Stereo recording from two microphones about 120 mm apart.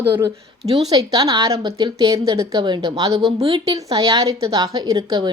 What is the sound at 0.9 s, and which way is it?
Speech, 35° right (ahead or behind).